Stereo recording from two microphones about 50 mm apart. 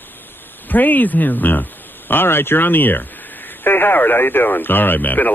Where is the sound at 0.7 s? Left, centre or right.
Left.